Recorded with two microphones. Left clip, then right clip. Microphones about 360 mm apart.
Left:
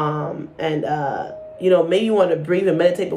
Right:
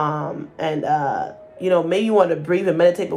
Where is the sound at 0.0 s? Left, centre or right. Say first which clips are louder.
Even; centre.